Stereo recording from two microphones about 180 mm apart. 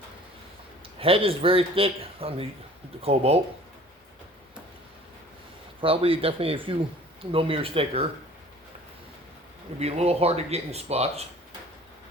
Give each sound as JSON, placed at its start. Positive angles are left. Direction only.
{"t": 0.9, "sound": "speech", "side_deg": -30}
{"t": 5.8, "sound": "speech", "side_deg": -30}
{"t": 9.7, "sound": "speech", "side_deg": -35}